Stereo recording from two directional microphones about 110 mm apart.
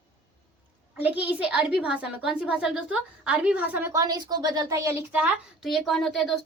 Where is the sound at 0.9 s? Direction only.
15° right (ahead or behind).